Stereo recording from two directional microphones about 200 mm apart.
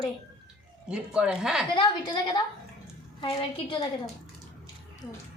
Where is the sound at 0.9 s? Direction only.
5° right (ahead or behind).